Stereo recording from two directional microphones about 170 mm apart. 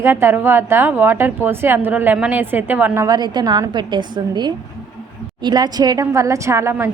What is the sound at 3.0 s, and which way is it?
A woman's voice, 25° right (ahead or behind).